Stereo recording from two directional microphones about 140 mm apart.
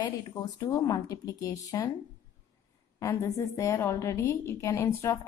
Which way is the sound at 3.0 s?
20° left (ahead or behind).